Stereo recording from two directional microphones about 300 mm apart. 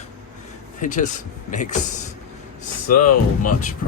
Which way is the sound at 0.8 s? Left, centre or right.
Left.